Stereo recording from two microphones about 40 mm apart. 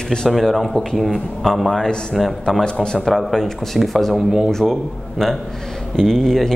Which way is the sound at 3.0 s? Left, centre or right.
Centre.